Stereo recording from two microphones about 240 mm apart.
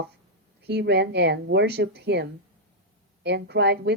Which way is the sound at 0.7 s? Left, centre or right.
Right.